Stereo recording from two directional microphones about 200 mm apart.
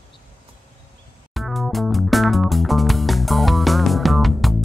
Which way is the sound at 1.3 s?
Centre (ahead or behind).